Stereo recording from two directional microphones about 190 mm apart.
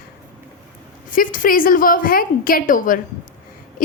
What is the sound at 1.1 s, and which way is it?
A woman's voice, 45° left (ahead or behind).